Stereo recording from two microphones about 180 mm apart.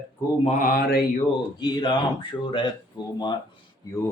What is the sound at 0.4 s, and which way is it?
Mantra, 45° left (ahead or behind).